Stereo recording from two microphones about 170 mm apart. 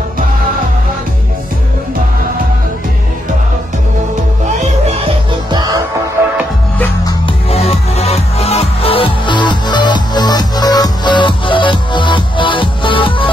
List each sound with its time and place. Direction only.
4.6 s music: 35° right (ahead or behind)
7.1 s music: 30° left (ahead or behind)